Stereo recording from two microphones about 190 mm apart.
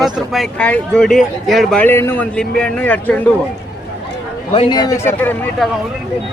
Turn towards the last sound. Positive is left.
turn(degrees=10)  # may be behind; listen again after turning